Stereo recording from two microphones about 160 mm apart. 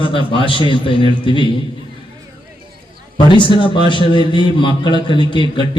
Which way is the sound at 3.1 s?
30° left (ahead or behind).